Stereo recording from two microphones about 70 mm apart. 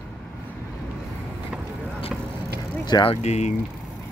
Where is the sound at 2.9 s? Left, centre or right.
Left.